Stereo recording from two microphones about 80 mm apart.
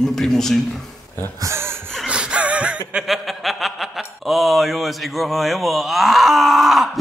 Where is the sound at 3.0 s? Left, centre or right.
Centre.